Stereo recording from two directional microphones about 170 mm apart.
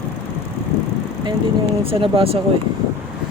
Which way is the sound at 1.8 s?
35° right (ahead or behind).